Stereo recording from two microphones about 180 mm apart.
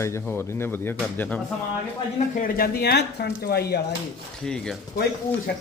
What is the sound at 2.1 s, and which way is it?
Speech, 45° left (ahead or behind).